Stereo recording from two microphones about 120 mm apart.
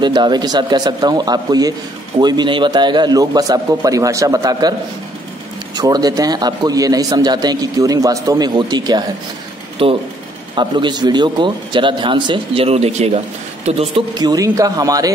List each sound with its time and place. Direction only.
0.0 s a man's voice: 40° right (ahead or behind)
5.8 s a man's voice: 35° right (ahead or behind)
9.8 s speech: 50° right (ahead or behind)
10.5 s a man's voice: 40° right (ahead or behind); by 14.0 s 55° right (ahead or behind)
14.1 s a man's voice: 35° right (ahead or behind)